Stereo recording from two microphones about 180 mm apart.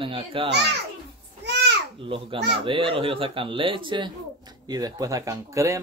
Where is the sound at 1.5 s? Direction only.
70° right (ahead or behind).